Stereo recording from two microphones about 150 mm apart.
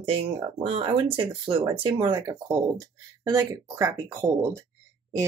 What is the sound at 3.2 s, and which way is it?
Speech, 25° right (ahead or behind).